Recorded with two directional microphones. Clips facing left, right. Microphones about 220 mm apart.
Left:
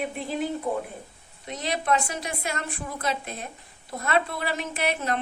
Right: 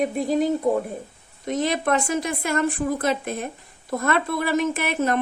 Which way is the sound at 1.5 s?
50° right (ahead or behind).